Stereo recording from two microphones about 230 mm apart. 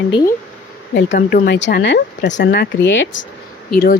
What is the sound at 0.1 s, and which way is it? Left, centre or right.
Speech, centre.